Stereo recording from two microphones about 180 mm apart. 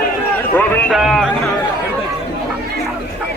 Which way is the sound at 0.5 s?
Centre (ahead or behind).